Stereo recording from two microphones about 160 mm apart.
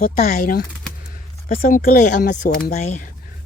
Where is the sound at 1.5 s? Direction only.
60° left (ahead or behind).